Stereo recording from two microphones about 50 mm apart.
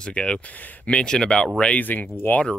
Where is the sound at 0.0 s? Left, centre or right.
Centre.